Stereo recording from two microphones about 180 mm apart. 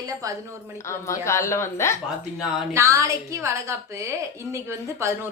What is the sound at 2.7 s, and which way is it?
A woman's voice, 15° right (ahead or behind).